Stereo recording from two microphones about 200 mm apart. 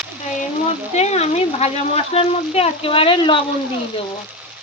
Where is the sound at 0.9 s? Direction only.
35° left (ahead or behind).